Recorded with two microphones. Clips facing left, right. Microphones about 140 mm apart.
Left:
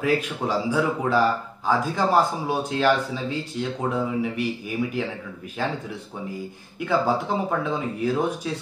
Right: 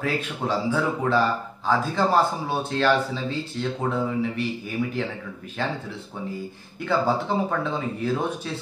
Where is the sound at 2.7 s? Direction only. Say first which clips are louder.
Even; 10° left (ahead or behind).